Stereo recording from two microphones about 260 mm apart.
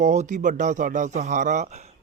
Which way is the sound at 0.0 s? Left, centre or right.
Right.